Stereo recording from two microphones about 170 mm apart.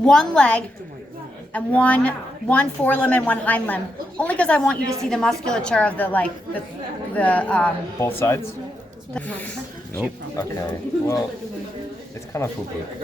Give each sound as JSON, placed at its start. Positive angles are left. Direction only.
{"t": 0.0, "sound": "a woman's voice", "side_deg": 5}
{"t": 12.3, "sound": "a woman's voice", "side_deg": 15}